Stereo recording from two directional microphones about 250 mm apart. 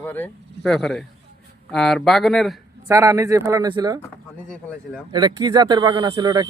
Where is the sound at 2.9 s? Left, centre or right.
Centre.